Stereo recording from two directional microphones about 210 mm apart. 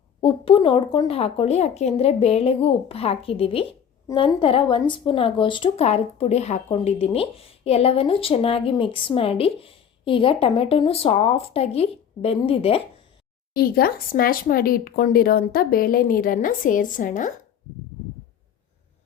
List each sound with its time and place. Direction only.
0.2 s speech: 25° left (ahead or behind)
13.5 s speech: 45° left (ahead or behind)